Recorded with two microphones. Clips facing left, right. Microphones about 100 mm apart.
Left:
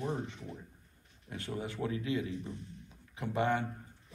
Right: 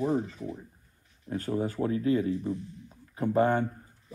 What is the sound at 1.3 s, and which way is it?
Speech, 40° right (ahead or behind).